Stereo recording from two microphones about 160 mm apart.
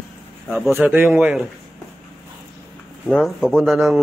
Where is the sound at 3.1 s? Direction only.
Centre (ahead or behind).